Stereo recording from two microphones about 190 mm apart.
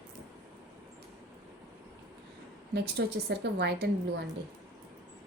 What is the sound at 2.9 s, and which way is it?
Speech, 60° right (ahead or behind).